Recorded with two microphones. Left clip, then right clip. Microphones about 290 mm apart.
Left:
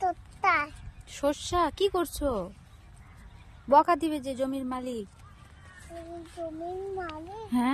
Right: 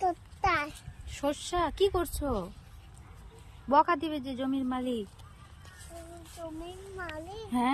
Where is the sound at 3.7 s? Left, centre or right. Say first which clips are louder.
Left 3 dB; centre.